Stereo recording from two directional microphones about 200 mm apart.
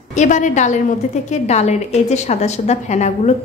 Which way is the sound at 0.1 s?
35° left (ahead or behind).